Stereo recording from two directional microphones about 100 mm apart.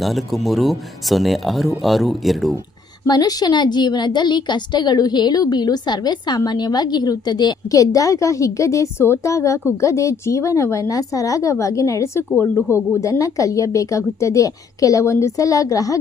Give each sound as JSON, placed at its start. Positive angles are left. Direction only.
{"t": 0.0, "sound": "speech", "side_deg": 0}
{"t": 3.1, "sound": "a woman's voice", "side_deg": 40}